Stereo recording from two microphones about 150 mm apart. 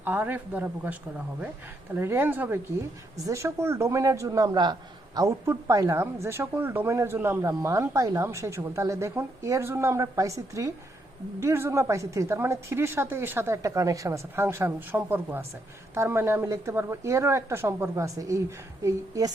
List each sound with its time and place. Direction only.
0.0 s a woman's voice: 10° right (ahead or behind)
2.0 s a woman's voice: 15° right (ahead or behind)